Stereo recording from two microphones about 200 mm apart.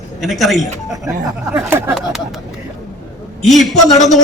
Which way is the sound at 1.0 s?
15° right (ahead or behind).